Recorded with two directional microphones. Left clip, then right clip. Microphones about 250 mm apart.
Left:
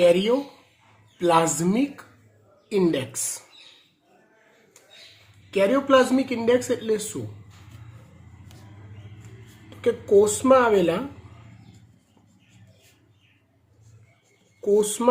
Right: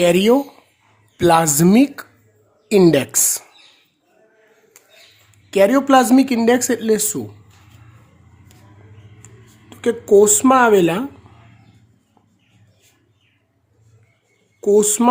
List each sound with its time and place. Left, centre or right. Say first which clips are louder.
0.0 s a woman's voice: right 5 dB; right
5.5 s speech: right 6 dB; right
9.6 s speech: right 5 dB; right
14.6 s speech: right 7 dB; right